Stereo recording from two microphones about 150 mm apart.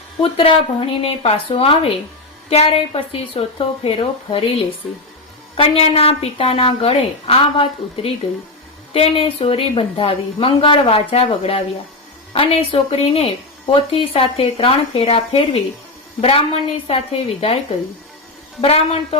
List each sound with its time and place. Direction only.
0.2 s speech: 35° left (ahead or behind)
18.6 s a woman's voice: 45° left (ahead or behind)